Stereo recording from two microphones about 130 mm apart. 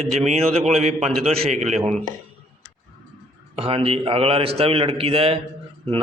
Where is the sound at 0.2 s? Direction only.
55° right (ahead or behind).